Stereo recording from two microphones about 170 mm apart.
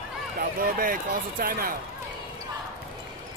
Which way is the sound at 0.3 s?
55° right (ahead or behind).